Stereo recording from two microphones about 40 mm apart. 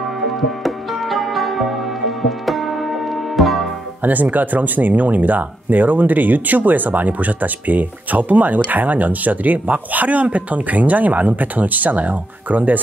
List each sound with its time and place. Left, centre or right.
0.4 s music: centre
4.0 s speech: right